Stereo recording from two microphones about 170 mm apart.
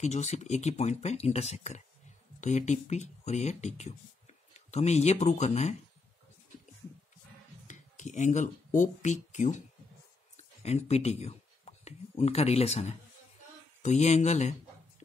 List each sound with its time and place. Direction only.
0.0 s speech: 40° left (ahead or behind)
7.6 s speech: 45° left (ahead or behind)
10.3 s a sound: 40° left (ahead or behind)
13.8 s speech: 40° left (ahead or behind)